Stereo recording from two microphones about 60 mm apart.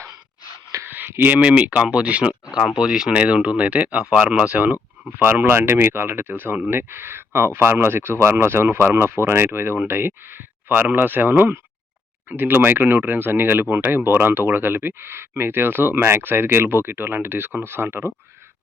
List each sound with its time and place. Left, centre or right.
0.9 s a sound: right
1.4 s speech: centre
5.1 s speech: right